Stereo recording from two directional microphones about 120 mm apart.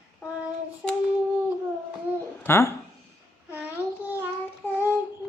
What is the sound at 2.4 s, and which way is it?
Speech, 20° left (ahead or behind).